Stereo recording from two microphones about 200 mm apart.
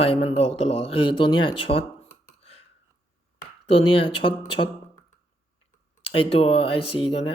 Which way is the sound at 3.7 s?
25° left (ahead or behind).